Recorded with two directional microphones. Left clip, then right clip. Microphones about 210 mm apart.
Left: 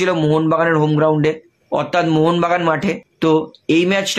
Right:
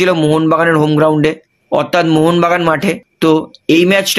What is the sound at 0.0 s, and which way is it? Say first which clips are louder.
Speech: right 5 dB; 40° right (ahead or behind).